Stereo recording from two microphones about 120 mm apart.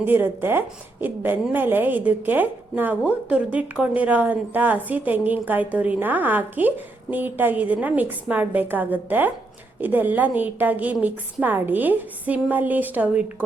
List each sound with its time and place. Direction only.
0.0 s a woman's voice: 20° right (ahead or behind)